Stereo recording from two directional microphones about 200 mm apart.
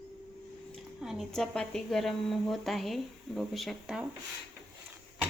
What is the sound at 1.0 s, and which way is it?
Speech, centre (ahead or behind).